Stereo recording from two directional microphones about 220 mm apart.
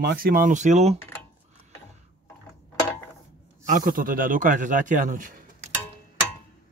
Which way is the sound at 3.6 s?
40° right (ahead or behind).